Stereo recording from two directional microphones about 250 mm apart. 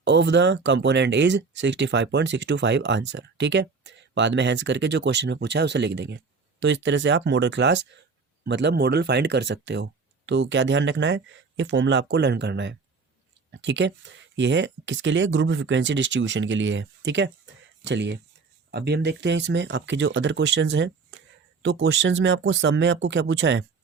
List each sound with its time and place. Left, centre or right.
0.0 s speech: right